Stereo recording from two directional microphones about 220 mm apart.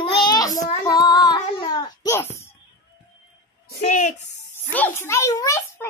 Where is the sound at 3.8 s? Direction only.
35° left (ahead or behind).